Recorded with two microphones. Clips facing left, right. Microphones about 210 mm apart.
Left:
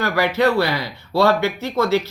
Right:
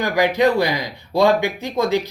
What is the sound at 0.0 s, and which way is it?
Speech, 15° right (ahead or behind).